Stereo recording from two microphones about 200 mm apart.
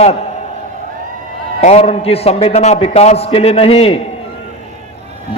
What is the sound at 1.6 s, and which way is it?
A man's voice, 30° left (ahead or behind).